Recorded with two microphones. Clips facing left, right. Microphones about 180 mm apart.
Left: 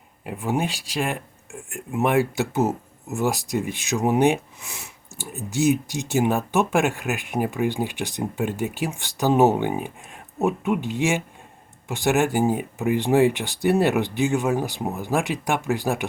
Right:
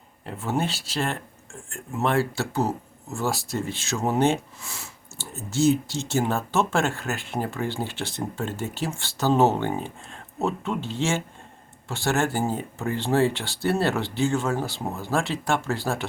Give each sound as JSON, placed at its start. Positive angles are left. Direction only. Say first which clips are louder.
{"t": 0.3, "sound": "speech", "louder": "left 2 dB", "side_deg": 15}